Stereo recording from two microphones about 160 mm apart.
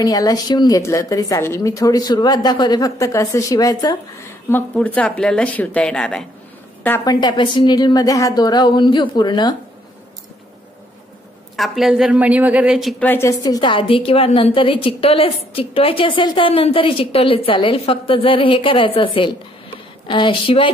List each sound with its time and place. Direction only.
0.0 s a woman's voice: 25° left (ahead or behind)
4.5 s speech: 10° left (ahead or behind)
7.1 s a woman's voice: 25° left (ahead or behind)
11.5 s a woman's voice: centre (ahead or behind)
13.0 s a woman's voice: 15° left (ahead or behind); by 20.7 s 35° left (ahead or behind)